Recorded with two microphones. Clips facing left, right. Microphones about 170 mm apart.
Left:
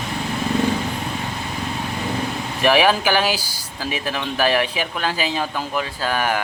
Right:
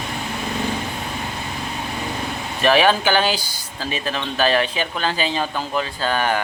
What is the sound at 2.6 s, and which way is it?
Speech, 10° left (ahead or behind).